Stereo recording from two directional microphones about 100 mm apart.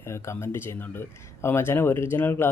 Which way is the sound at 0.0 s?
30° left (ahead or behind).